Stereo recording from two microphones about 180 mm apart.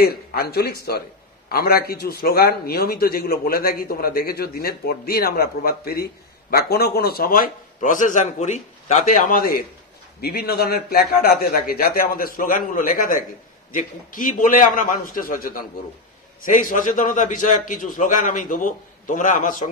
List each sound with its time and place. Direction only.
0.0 s a man's voice: 60° left (ahead or behind)